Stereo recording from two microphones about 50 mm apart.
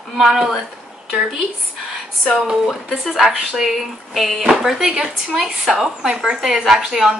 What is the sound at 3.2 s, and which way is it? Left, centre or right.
A woman's voice, centre.